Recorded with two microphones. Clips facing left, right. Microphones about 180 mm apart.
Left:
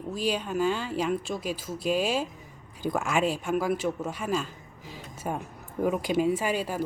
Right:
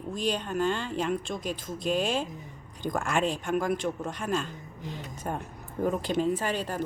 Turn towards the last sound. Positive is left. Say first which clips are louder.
# left 2 dB
turn(degrees=10)  # may be behind; listen again after turning